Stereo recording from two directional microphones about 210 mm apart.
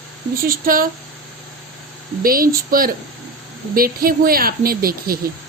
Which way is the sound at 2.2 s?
45° right (ahead or behind).